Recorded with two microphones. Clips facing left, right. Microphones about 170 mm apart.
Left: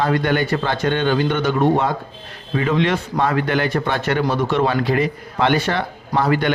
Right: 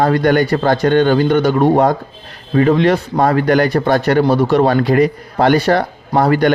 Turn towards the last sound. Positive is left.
turn(degrees=-40)  # may be behind; listen again after turning